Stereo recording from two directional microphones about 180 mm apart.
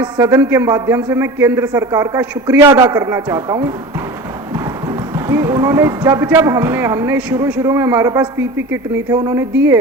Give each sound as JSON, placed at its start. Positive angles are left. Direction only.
{"t": 0.0, "sound": "a man's voice", "side_deg": -15}